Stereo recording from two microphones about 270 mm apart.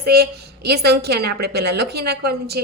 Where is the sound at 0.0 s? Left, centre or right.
Right.